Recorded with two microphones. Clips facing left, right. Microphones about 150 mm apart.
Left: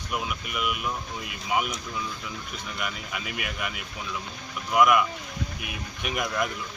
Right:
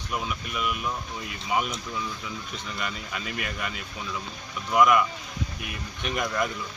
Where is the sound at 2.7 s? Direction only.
5° left (ahead or behind).